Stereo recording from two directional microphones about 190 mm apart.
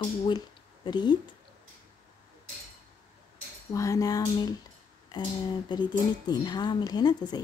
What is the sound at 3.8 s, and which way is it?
A woman's voice, 15° left (ahead or behind).